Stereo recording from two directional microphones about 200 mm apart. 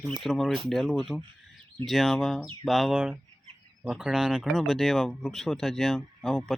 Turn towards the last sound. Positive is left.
turn(degrees=0)  # may be behind; listen again after turning